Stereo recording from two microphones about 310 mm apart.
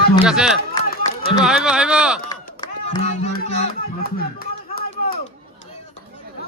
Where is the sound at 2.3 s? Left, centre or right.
Centre; by 5.2 s left.